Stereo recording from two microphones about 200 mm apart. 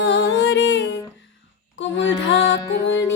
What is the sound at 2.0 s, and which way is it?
Music, 70° left (ahead or behind).